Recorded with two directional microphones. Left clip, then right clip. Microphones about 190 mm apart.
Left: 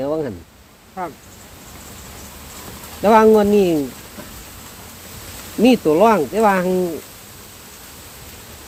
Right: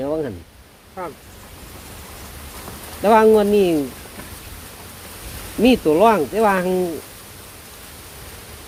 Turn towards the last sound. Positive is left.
turn(degrees=20)  # may be behind; listen again after turning